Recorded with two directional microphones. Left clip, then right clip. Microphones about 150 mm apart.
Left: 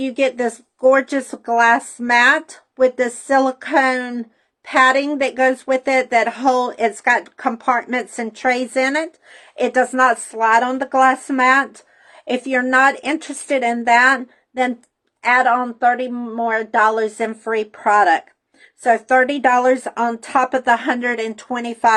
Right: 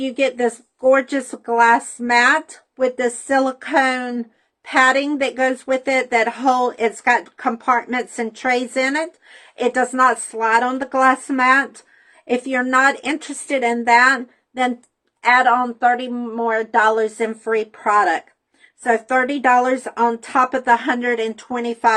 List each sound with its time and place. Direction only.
0.0 s speech: 35° left (ahead or behind)